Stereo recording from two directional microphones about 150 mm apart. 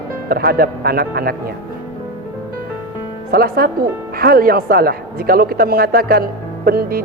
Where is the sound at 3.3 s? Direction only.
90° right.